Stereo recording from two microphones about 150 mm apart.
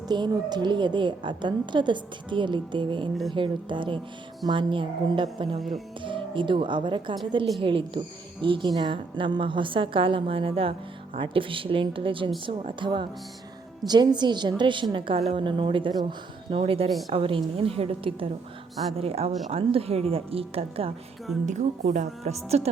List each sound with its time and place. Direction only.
0.1 s a woman's voice: 30° right (ahead or behind)
21.4 s a woman's voice: 55° right (ahead or behind)